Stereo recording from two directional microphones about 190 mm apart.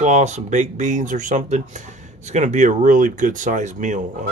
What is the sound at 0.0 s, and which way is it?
Speech, 40° right (ahead or behind).